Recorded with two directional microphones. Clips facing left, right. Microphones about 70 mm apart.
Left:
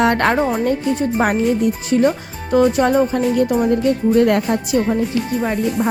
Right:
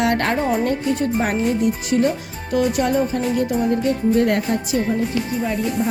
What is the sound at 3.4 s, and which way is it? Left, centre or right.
Speech, left.